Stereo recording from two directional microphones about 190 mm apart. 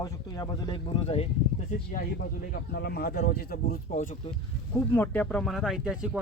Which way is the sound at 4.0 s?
35° left (ahead or behind).